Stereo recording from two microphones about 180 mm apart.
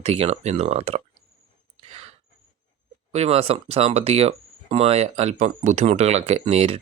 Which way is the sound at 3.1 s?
35° right (ahead or behind).